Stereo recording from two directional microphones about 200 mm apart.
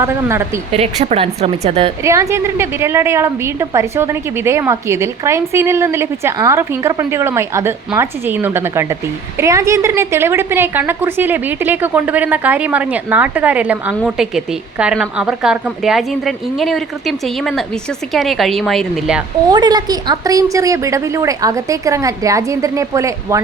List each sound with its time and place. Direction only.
0.0 s a woman's voice: 10° right (ahead or behind)
0.7 s speech: 30° right (ahead or behind)
2.0 s a woman's voice: 15° right (ahead or behind)
19.5 s a woman's voice: 20° right (ahead or behind)